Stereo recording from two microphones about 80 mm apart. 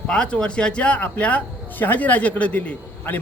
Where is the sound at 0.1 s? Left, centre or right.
Centre.